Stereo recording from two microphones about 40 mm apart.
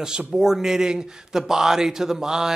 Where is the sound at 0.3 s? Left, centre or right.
Centre.